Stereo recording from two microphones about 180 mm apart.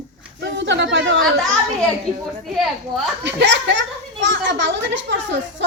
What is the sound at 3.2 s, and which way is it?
A child's voice, 85° right.